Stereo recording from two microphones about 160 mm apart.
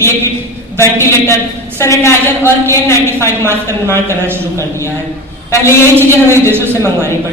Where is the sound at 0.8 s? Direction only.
15° left (ahead or behind).